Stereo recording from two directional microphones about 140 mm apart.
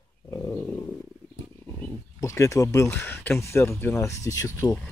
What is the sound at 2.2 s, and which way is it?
Speech, 20° left (ahead or behind).